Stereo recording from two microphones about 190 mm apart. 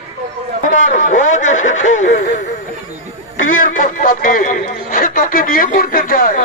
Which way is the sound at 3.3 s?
90° left.